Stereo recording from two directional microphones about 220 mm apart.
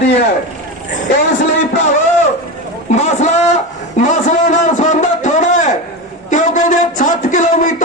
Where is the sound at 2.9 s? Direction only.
30° left (ahead or behind).